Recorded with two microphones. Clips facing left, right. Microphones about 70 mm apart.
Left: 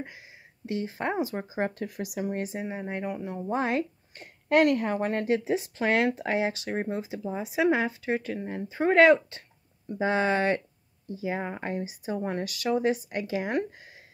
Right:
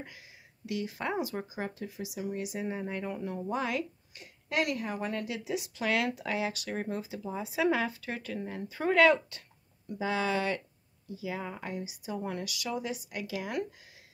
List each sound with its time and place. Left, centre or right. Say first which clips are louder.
0.7 s speech: left 4 dB; left
1.6 s speech: left 7 dB; left
2.6 s speech: left 2 dB; left